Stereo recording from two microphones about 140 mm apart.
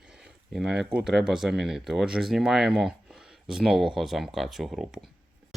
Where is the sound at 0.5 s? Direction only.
5° right (ahead or behind).